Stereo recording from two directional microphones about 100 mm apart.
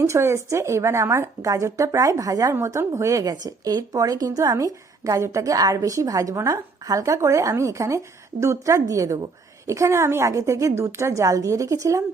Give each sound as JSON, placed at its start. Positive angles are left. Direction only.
{"t": 0.1, "sound": "speech", "side_deg": -25}